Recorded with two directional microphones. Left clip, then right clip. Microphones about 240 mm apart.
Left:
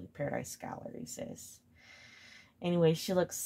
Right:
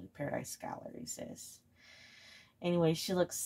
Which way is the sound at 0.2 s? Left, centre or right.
Left.